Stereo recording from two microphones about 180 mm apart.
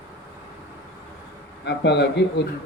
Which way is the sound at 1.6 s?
70° left (ahead or behind).